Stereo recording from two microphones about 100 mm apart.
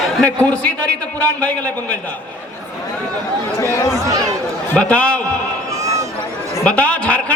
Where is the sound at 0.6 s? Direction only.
10° left (ahead or behind).